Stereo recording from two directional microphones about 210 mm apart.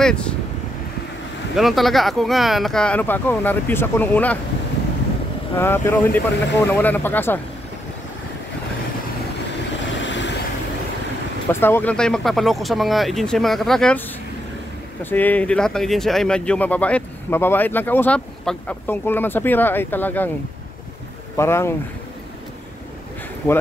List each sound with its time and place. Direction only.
0.0 s speech: 5° left (ahead or behind)
1.6 s speech: centre (ahead or behind)
5.6 s speech: 10° left (ahead or behind)
10.0 s vehicle: 60° left (ahead or behind)
11.6 s speech: 10° left (ahead or behind)
15.0 s speech: 10° left (ahead or behind)
21.4 s speech: 10° left (ahead or behind)